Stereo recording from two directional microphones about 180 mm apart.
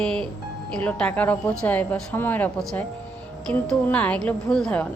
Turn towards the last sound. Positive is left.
turn(degrees=5)  # may be behind; listen again after turning